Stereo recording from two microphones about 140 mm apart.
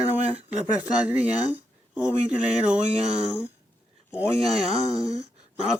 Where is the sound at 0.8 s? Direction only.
10° right (ahead or behind).